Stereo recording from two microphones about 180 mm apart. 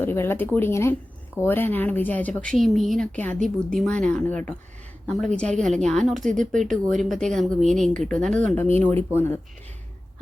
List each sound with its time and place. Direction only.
0.0 s speech: 10° left (ahead or behind)
6.2 s speech: 45° right (ahead or behind)
6.5 s speech: centre (ahead or behind)